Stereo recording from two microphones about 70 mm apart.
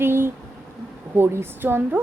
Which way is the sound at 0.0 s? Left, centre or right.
Right.